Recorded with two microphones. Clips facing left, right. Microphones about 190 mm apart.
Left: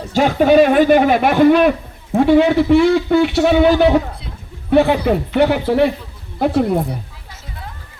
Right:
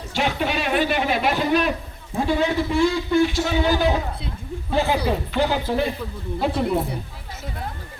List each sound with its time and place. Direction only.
0.1 s a man's voice: 45° left (ahead or behind); by 5.9 s 70° left (ahead or behind)